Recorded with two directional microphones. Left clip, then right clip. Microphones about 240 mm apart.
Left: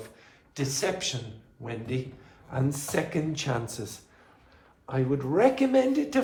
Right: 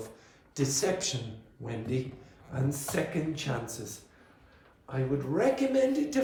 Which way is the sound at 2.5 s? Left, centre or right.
Left.